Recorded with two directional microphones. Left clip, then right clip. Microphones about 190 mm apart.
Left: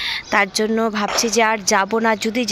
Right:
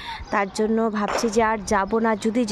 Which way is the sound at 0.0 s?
5° right (ahead or behind).